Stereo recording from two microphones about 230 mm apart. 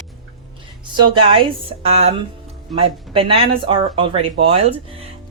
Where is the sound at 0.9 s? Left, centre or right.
Right.